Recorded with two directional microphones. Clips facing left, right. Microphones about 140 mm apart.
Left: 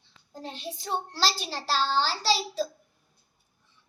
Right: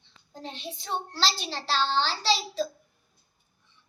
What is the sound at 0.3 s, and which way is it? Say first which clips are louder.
A child's voice: left 1 dB; 5° left (ahead or behind).